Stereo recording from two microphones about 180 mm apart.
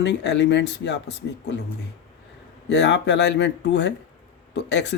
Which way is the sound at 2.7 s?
75° left (ahead or behind).